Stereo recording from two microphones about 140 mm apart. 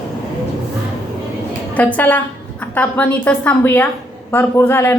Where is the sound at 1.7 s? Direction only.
10° left (ahead or behind).